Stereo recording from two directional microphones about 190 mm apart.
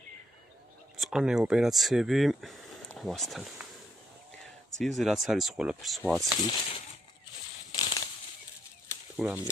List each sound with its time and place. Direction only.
0.9 s speech: centre (ahead or behind)
4.7 s speech: centre (ahead or behind)
6.4 s speech: 30° left (ahead or behind)
7.7 s a sound: 20° left (ahead or behind)
9.1 s speech: 5° right (ahead or behind)